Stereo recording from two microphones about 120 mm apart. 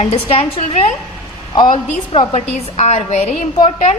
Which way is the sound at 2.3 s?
65° left (ahead or behind).